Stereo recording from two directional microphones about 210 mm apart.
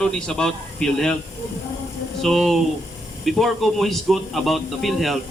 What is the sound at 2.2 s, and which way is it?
A man's voice, centre (ahead or behind).